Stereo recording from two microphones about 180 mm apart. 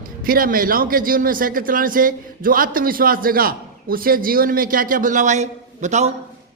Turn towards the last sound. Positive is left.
turn(degrees=-40)  # may be behind; listen again after turning